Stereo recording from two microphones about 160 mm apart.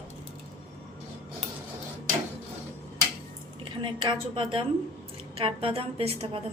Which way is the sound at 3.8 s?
30° right (ahead or behind).